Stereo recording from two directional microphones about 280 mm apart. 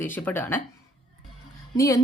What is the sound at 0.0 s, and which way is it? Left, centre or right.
Speech, centre.